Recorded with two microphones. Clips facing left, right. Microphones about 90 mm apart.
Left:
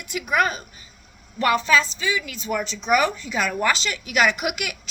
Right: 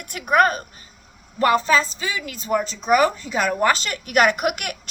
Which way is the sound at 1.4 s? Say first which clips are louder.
Right 2 dB; 35° right (ahead or behind).